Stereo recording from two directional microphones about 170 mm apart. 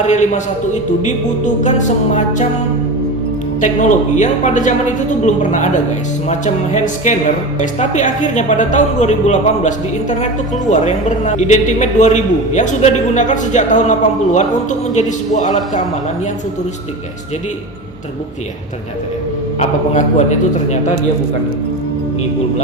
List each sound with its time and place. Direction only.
0.0 s a woman's voice: 45° left (ahead or behind)
3.6 s a woman's voice: 45° left (ahead or behind)
19.5 s a woman's voice: 45° left (ahead or behind)